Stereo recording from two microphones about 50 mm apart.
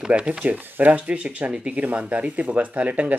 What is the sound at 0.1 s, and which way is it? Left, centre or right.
Speech, right.